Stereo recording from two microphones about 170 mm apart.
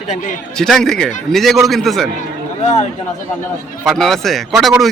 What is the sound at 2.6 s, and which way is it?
Speech, 40° left (ahead or behind).